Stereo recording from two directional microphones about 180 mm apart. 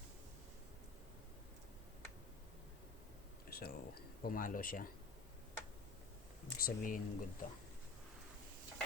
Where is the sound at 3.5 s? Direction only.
60° left (ahead or behind).